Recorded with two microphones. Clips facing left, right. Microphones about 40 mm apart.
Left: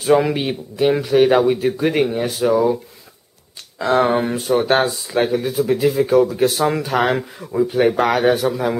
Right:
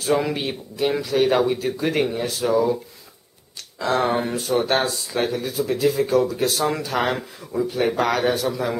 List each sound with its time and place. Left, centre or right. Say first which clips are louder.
0.0 s speech: left 6 dB; centre